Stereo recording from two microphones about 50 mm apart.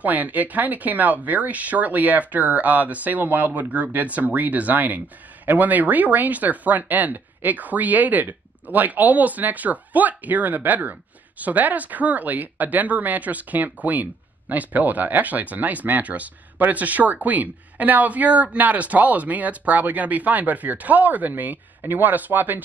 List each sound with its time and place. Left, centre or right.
0.0 s speech: right